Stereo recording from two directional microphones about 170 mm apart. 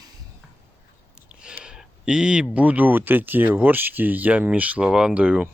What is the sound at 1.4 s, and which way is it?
Speech, 5° right (ahead or behind).